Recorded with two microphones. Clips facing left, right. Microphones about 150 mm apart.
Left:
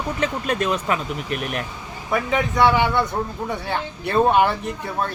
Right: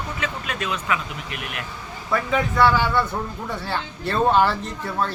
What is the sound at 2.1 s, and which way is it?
Speech, 20° left (ahead or behind).